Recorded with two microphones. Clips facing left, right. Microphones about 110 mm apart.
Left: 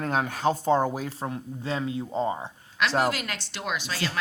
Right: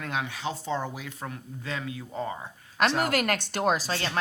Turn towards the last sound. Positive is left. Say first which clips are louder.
# right 6 dB
turn(degrees=-40)  # may be behind; listen again after turning